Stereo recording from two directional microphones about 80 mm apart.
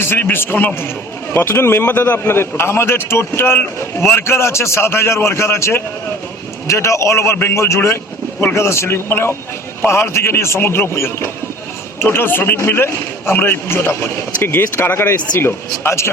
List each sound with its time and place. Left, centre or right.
0.0 s a man's voice: left